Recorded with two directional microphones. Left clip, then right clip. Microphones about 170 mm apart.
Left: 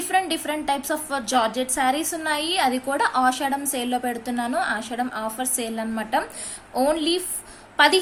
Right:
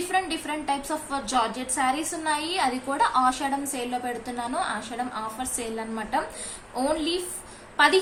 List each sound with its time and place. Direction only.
0.1 s a woman's voice: 50° left (ahead or behind)